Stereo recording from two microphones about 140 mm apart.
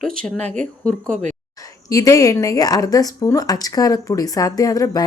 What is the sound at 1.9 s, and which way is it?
A woman's voice, 25° left (ahead or behind).